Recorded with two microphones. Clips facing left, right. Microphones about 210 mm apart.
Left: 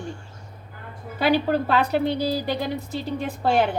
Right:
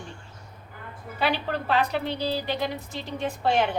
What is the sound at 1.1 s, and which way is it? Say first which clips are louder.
A woman's voice: left 7 dB; 40° left (ahead or behind).